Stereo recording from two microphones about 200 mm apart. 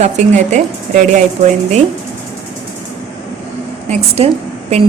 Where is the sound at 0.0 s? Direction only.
35° right (ahead or behind).